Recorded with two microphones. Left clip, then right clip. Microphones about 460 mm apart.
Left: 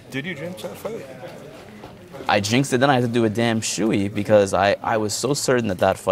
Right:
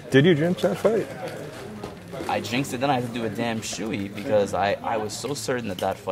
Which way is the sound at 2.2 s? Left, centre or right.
Left.